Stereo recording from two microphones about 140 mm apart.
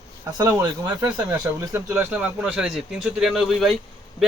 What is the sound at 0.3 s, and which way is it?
Speech, 25° right (ahead or behind).